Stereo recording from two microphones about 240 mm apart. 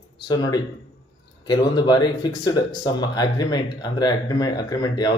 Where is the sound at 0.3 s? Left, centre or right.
Centre.